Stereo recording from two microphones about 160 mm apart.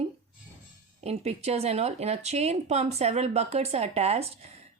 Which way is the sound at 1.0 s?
40° right (ahead or behind).